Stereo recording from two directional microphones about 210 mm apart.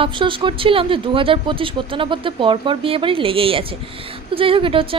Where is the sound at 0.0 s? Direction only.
25° right (ahead or behind).